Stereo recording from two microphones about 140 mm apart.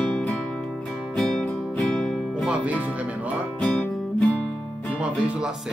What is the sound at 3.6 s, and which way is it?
Music, 10° left (ahead or behind).